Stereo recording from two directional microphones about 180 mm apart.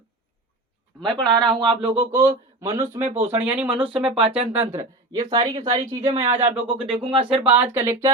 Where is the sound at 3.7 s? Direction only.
30° right (ahead or behind).